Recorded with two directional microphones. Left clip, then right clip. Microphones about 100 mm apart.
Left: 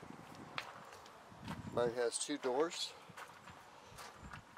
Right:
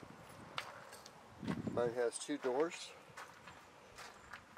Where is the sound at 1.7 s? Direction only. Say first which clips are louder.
Left 1 dB; 20° left (ahead or behind).